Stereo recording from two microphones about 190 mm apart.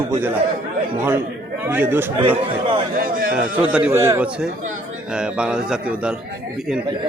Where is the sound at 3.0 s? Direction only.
50° right (ahead or behind).